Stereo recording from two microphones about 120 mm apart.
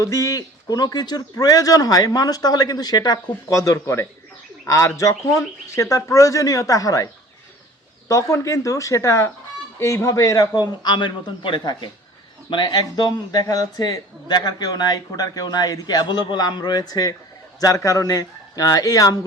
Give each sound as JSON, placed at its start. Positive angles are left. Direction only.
{"t": 0.0, "sound": "speech", "side_deg": 25}
{"t": 3.6, "sound": "a man's voice", "side_deg": 25}
{"t": 10.8, "sound": "a man's voice", "side_deg": 45}